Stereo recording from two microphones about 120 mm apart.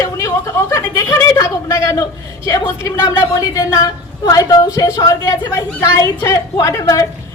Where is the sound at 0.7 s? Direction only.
25° left (ahead or behind).